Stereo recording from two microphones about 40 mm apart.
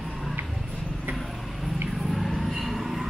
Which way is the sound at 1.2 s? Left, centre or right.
Centre.